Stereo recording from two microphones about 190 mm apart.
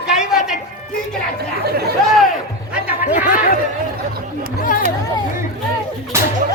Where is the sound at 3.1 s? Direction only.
45° left (ahead or behind).